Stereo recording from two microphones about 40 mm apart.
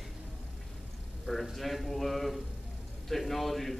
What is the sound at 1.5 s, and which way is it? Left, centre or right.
A man's voice, centre.